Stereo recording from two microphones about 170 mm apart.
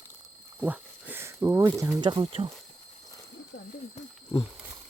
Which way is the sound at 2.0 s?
25° right (ahead or behind).